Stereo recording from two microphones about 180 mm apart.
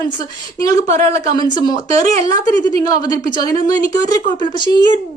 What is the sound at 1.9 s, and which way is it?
Speech, 40° right (ahead or behind).